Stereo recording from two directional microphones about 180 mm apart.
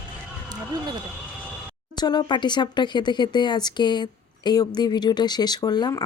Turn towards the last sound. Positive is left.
turn(degrees=20)  # may be behind; listen again after turning